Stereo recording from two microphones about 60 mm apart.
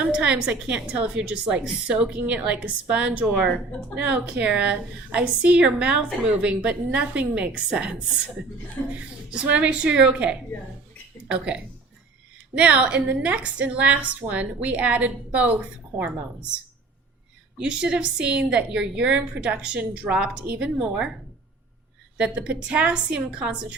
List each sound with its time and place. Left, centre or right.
0.0 s a woman's voice: centre
9.0 s a woman's voice: right
17.6 s a woman's voice: centre
22.2 s a woman's voice: right